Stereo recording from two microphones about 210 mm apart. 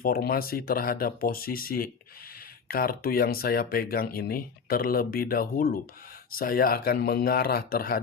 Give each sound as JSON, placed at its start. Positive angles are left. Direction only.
{"t": 0.0, "sound": "speech", "side_deg": 45}